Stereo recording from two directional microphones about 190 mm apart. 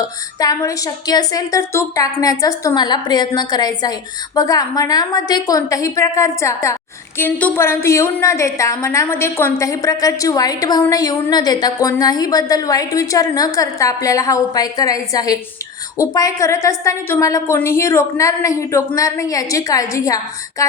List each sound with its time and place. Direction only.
0.0 s a woman's voice: 20° left (ahead or behind)